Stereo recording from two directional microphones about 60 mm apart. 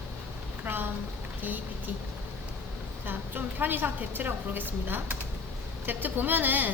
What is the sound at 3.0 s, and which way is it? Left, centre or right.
A woman's voice, right.